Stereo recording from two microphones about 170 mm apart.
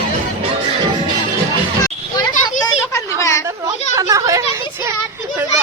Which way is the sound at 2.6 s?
15° left (ahead or behind).